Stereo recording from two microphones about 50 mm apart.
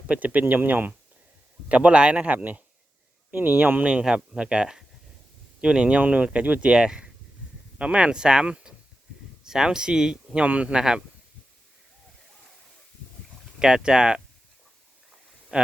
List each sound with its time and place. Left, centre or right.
0.1 s speech: right
1.6 s speech: right
4.0 s speech: centre
6.7 s speech: centre
10.4 s speech: right
10.8 s speech: centre
13.6 s speech: centre
15.5 s speech: right